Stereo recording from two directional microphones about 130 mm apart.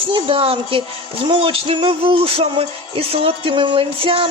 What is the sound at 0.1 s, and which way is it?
Music, 45° right (ahead or behind).